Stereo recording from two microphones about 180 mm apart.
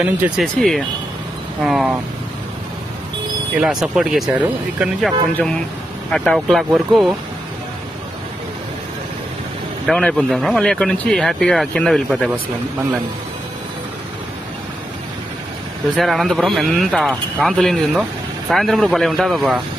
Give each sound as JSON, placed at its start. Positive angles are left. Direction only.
{"t": 0.0, "sound": "speech", "side_deg": -10}
{"t": 0.6, "sound": "speech", "side_deg": 0}
{"t": 3.5, "sound": "speech", "side_deg": -5}
{"t": 6.1, "sound": "speech", "side_deg": 0}
{"t": 9.8, "sound": "speech", "side_deg": 5}
{"t": 15.9, "sound": "speech", "side_deg": 0}